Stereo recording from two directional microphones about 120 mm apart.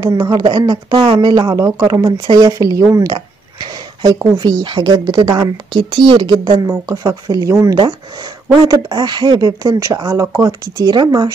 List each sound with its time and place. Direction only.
0.0 s speech: 30° right (ahead or behind)
4.4 s speech: 35° right (ahead or behind)
8.6 s speech: 35° right (ahead or behind)